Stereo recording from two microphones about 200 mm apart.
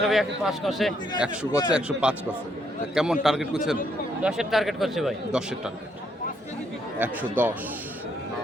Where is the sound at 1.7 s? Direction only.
5° right (ahead or behind).